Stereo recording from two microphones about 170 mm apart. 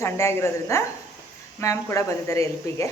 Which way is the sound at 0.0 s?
15° left (ahead or behind).